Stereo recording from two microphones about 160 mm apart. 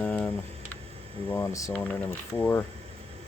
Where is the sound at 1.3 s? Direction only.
20° left (ahead or behind).